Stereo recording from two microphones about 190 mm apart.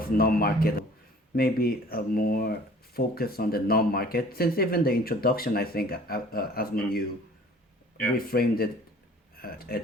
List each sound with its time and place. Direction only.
0.0 s speech: 50° left (ahead or behind)
8.3 s speech: 50° left (ahead or behind)